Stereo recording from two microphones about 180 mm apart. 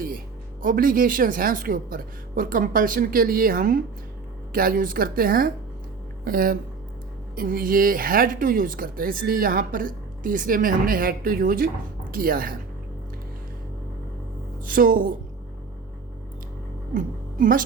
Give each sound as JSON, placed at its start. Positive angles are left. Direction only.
{"t": 0.6, "sound": "speech", "side_deg": -50}
{"t": 14.6, "sound": "speech", "side_deg": -50}
{"t": 16.9, "sound": "speech", "side_deg": -50}